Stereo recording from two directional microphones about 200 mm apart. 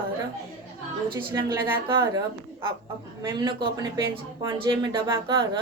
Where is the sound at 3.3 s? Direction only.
20° right (ahead or behind).